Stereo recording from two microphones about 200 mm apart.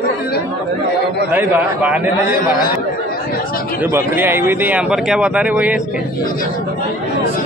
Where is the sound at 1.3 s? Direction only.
10° right (ahead or behind).